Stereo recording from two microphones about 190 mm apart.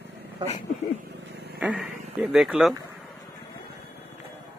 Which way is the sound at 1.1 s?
60° right (ahead or behind).